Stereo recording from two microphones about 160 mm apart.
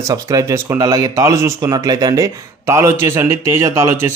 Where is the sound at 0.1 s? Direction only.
20° right (ahead or behind).